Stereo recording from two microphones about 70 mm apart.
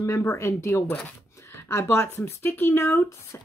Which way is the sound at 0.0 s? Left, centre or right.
Left.